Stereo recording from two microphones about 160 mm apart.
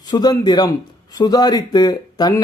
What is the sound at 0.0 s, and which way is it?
Speech, 25° left (ahead or behind).